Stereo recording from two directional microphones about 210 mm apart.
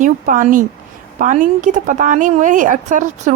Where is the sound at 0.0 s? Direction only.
40° right (ahead or behind).